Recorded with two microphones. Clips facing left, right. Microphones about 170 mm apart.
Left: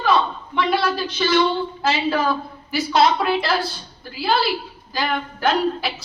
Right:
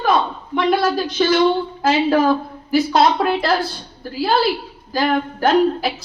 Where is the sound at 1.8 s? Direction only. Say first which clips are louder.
Right 6 dB; 50° right (ahead or behind).